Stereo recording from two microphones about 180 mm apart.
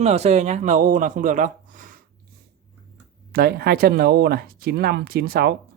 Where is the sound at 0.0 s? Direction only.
35° right (ahead or behind).